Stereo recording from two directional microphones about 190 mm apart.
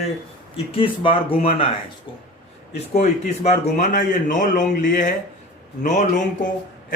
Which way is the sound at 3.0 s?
35° left (ahead or behind).